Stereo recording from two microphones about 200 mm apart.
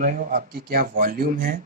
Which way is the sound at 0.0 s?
45° right (ahead or behind).